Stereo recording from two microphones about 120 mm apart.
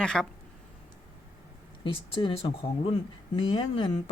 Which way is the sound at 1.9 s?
50° left (ahead or behind).